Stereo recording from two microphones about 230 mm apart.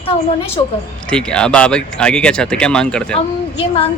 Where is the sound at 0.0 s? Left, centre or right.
Left.